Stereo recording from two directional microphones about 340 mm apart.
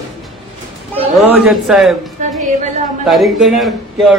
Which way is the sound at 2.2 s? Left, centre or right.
Right.